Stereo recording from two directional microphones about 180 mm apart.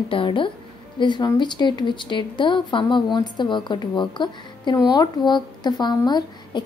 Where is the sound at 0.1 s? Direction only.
30° left (ahead or behind).